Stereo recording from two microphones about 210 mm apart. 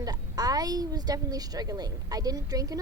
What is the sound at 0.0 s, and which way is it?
Speech, 15° right (ahead or behind).